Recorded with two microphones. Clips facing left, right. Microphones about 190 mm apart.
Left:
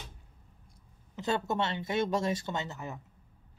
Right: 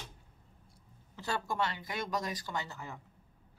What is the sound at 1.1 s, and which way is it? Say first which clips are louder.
Speech: left 4 dB; 20° left (ahead or behind).